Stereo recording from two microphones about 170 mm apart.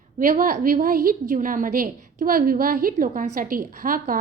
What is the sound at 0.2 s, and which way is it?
A woman's voice, 55° right (ahead or behind).